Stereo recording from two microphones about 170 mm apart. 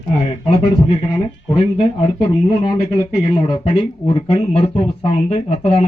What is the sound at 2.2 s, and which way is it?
Speech, 20° left (ahead or behind).